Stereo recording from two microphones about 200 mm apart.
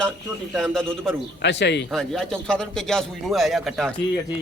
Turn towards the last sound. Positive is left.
turn(degrees=0)  # may be behind; listen again after turning